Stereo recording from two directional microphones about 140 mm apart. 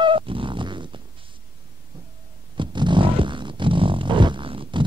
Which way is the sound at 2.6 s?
35° right (ahead or behind).